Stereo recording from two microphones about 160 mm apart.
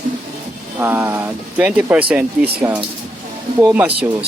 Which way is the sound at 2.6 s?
20° right (ahead or behind).